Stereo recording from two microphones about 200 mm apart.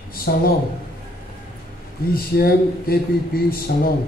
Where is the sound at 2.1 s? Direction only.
50° left (ahead or behind).